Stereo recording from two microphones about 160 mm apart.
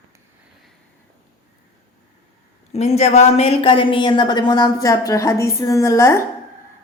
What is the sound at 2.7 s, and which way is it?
A woman's voice, 40° left (ahead or behind).